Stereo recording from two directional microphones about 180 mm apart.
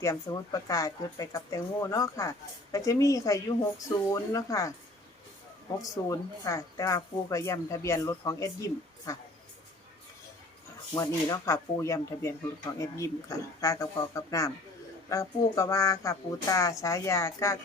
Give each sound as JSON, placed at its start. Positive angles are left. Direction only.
{"t": 0.0, "sound": "speech", "side_deg": 20}
{"t": 5.7, "sound": "speech", "side_deg": 20}
{"t": 10.9, "sound": "speech", "side_deg": 20}